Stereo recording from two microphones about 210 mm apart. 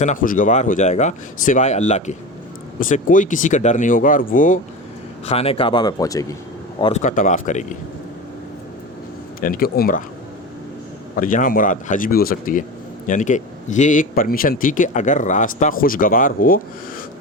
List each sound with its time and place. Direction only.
0.0 s a man's voice: 35° left (ahead or behind)
5.2 s speech: 30° left (ahead or behind)
7.0 s a man's voice: 40° left (ahead or behind)
9.4 s speech: 45° left (ahead or behind)
11.2 s a man's voice: 40° left (ahead or behind)